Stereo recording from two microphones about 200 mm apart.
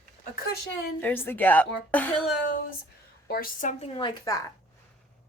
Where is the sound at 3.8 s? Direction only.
30° left (ahead or behind).